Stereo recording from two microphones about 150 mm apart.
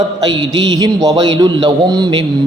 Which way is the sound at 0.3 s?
30° right (ahead or behind).